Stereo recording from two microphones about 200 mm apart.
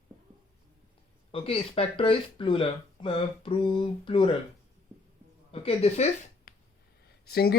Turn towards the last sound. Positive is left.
turn(degrees=50)  # may be behind; listen again after turning